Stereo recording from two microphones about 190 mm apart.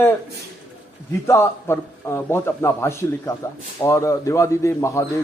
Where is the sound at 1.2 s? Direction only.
15° left (ahead or behind).